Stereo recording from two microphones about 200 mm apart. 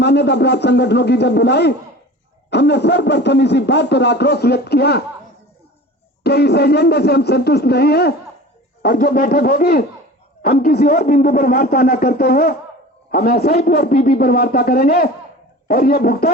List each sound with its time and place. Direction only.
0.0 s speech: 55° left (ahead or behind)
6.2 s a man's voice: 55° left (ahead or behind)